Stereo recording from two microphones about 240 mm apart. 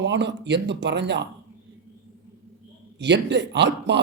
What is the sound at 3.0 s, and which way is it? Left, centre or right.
Speech, right.